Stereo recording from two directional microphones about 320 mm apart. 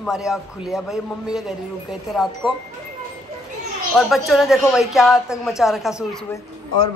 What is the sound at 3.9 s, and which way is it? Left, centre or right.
A man's voice, centre.